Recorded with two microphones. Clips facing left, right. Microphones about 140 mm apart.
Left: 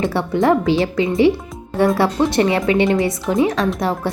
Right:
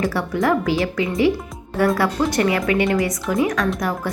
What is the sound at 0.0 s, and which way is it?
Speech, 25° left (ahead or behind).